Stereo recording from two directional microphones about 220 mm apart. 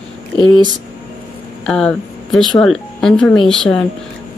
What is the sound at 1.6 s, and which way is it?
Speech, 5° left (ahead or behind).